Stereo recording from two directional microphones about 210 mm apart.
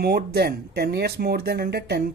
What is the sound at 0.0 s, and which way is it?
Speech, 45° right (ahead or behind).